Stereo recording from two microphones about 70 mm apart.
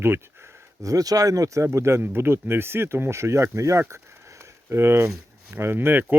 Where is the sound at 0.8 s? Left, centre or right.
Right.